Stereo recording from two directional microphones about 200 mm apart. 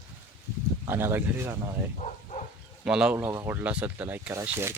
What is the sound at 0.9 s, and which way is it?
Speech, 10° right (ahead or behind).